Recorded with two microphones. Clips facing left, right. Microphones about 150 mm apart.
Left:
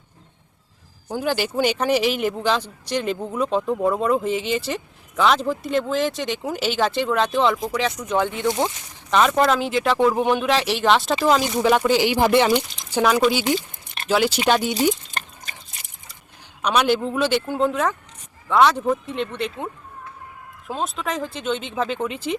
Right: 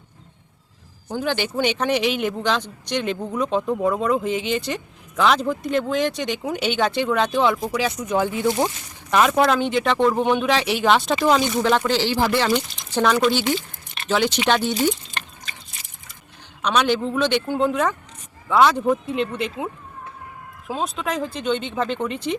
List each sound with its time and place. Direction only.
1.0 s speech: 5° left (ahead or behind)
15.1 s a sound: 40° left (ahead or behind)
16.6 s speech: 10° left (ahead or behind)